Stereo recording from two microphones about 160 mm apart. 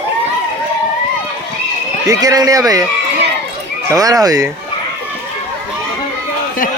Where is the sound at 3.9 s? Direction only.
25° right (ahead or behind).